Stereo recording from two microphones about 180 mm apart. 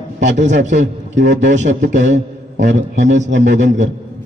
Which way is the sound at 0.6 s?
45° right (ahead or behind).